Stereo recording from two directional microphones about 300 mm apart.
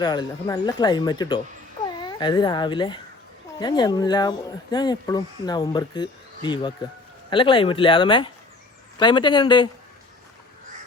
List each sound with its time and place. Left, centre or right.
0.0 s speech: centre